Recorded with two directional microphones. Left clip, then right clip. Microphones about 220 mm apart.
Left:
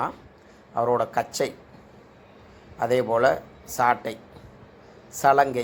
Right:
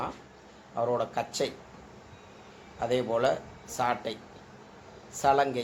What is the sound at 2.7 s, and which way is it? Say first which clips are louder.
A man's voice: left 6 dB; 25° left (ahead or behind).